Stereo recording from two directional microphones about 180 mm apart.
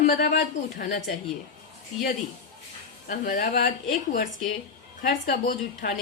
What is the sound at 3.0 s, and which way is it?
A woman's voice, 50° left (ahead or behind).